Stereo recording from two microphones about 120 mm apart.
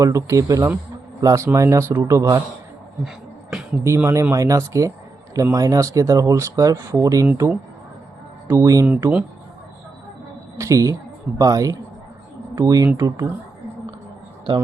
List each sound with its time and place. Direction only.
0.0 s speech: 25° right (ahead or behind)
3.5 s music: 5° right (ahead or behind)
3.8 s speech: 25° right (ahead or behind)
8.4 s speech: 25° right (ahead or behind)
8.9 s speech: 15° right (ahead or behind)
10.6 s speech: 25° right (ahead or behind)